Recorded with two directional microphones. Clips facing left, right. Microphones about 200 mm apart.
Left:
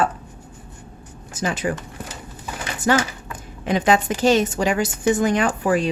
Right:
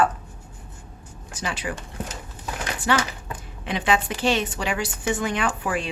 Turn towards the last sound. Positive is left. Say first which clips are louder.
# left 6 dB
turn(degrees=40)  # may be behind; listen again after turning